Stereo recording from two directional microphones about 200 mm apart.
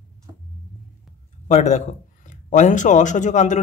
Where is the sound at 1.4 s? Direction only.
35° left (ahead or behind).